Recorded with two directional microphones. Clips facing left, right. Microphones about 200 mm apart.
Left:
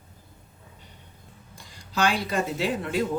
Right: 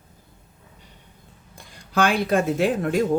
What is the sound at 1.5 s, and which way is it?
Speech, 55° right (ahead or behind).